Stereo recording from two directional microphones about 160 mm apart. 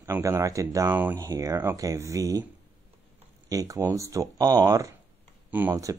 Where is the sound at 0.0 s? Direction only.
20° right (ahead or behind).